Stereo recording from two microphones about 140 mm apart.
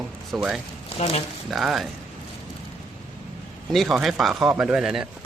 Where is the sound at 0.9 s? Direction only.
45° left (ahead or behind).